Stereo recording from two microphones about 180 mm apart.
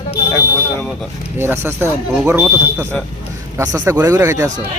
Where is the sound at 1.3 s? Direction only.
15° right (ahead or behind).